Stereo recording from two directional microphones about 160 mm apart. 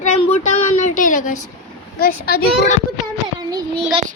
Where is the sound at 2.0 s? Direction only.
70° left (ahead or behind).